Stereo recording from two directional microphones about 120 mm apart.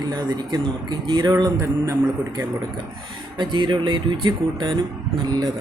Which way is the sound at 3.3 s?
40° right (ahead or behind).